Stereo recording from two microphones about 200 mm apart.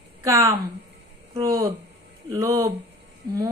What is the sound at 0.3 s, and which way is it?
Speech, 15° right (ahead or behind).